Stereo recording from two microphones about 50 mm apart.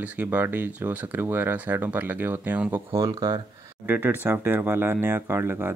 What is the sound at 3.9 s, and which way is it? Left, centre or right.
Speech, right.